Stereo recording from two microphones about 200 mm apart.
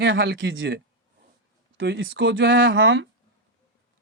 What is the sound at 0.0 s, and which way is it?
Speech, 60° right (ahead or behind).